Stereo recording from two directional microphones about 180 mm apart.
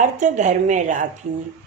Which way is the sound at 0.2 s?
40° right (ahead or behind).